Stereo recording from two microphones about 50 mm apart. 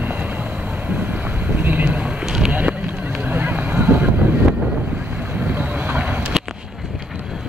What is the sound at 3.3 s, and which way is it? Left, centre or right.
Vehicle, right.